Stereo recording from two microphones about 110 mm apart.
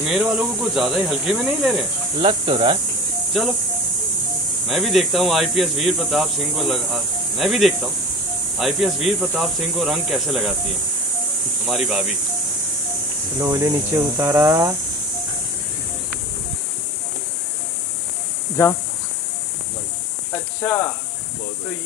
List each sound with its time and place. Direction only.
0.0 s speech: 5° right (ahead or behind)
2.1 s speech: 60° right (ahead or behind)
4.6 s speech: centre (ahead or behind)
11.6 s speech: 5° right (ahead or behind)
13.4 s speech: 30° right (ahead or behind)
20.6 s speech: 25° left (ahead or behind)